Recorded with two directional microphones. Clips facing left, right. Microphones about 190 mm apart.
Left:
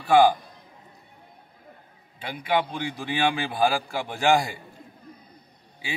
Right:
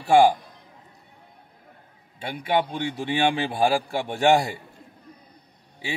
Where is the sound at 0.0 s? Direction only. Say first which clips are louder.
Right 1 dB; 25° right (ahead or behind).